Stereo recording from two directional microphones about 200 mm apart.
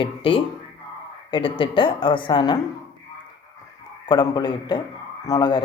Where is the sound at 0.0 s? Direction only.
25° left (ahead or behind).